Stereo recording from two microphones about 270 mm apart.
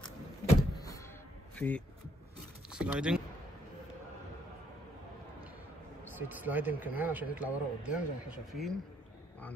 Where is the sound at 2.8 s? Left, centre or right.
Centre.